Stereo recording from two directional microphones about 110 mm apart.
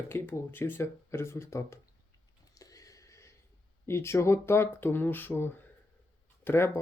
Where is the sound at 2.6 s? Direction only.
30° left (ahead or behind).